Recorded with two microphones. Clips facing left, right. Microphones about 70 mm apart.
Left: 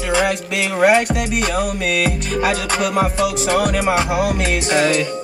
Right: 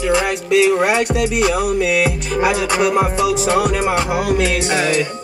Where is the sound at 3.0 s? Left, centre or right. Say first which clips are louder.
Right 2 dB; centre.